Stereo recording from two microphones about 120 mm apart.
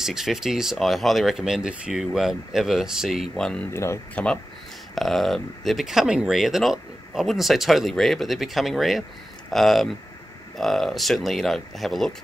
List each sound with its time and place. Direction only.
0.0 s speech: 5° right (ahead or behind)
3.7 s speech: 20° left (ahead or behind)
4.1 s speech: 10° left (ahead or behind)